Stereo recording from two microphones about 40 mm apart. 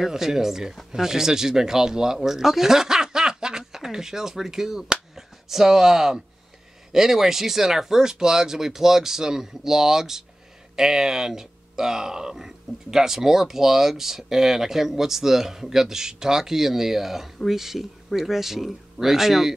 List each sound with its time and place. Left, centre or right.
0.0 s speech: centre